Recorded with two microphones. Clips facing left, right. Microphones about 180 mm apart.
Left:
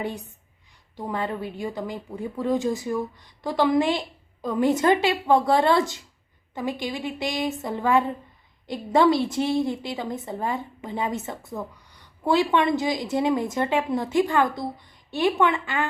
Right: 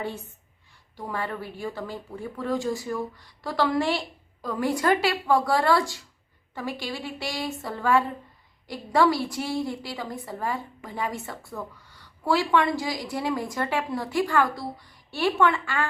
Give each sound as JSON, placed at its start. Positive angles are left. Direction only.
{"t": 0.0, "sound": "a woman's voice", "side_deg": 15}